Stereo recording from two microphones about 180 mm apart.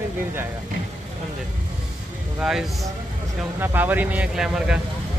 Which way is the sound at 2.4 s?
Centre (ahead or behind).